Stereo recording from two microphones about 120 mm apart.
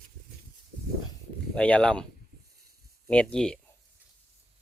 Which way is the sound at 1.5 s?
10° left (ahead or behind).